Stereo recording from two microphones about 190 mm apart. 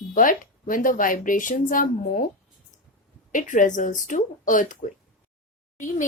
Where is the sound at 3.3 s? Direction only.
45° left (ahead or behind).